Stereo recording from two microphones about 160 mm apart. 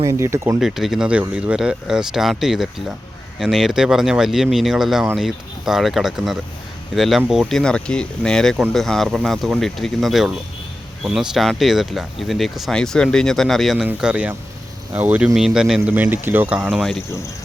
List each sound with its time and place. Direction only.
0.0 s speech: 15° right (ahead or behind)
0.6 s speech: centre (ahead or behind)